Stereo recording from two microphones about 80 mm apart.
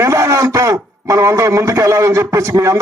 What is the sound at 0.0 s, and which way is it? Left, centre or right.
A man's voice, right.